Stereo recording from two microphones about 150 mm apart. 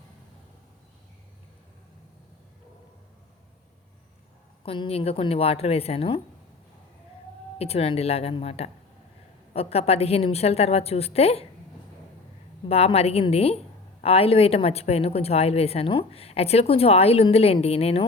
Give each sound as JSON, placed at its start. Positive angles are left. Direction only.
{"t": 4.6, "sound": "a woman's voice", "side_deg": 40}
{"t": 7.6, "sound": "a woman's voice", "side_deg": 40}
{"t": 12.6, "sound": "a woman's voice", "side_deg": 45}